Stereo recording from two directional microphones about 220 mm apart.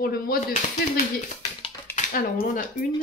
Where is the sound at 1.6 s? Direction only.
30° left (ahead or behind).